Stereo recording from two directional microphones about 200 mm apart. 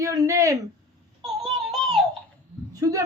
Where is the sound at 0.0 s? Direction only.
15° right (ahead or behind).